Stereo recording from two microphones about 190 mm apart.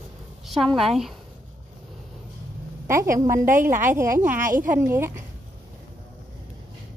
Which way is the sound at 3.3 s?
45° right (ahead or behind).